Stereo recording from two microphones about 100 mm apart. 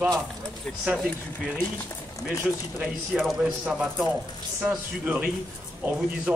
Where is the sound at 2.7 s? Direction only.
15° right (ahead or behind).